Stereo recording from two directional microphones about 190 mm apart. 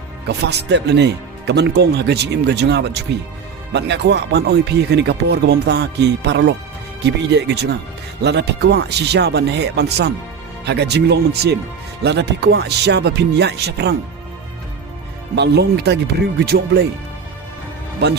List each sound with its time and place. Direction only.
0.3 s speech: 60° right (ahead or behind)
15.4 s speech: 60° right (ahead or behind)
18.0 s speech: 60° right (ahead or behind)